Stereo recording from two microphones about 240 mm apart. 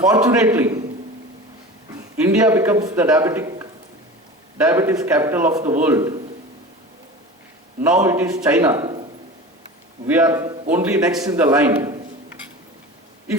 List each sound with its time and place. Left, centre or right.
0.0 s a man's voice: centre
2.2 s a man's voice: centre
7.9 s a man's voice: centre
10.1 s a man's voice: centre